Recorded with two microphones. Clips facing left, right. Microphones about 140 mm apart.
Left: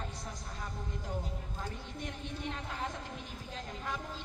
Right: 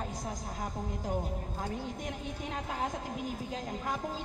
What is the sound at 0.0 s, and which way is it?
A woman's voice, 45° right (ahead or behind).